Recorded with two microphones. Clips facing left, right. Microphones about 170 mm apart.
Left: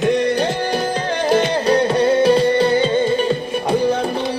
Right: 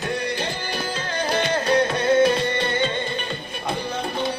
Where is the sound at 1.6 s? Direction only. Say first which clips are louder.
Left 3 dB; 35° left (ahead or behind).